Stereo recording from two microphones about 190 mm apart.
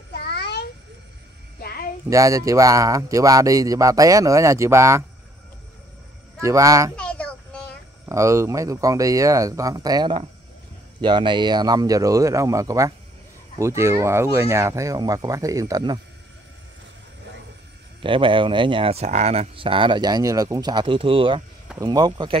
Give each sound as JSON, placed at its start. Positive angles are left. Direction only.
{"t": 0.1, "sound": "a sound", "side_deg": 60}
{"t": 2.0, "sound": "speech", "side_deg": -15}
{"t": 6.4, "sound": "speech", "side_deg": -15}
{"t": 7.0, "sound": "child singing", "side_deg": 5}
{"t": 8.1, "sound": "speech", "side_deg": -15}
{"t": 18.0, "sound": "speech", "side_deg": -25}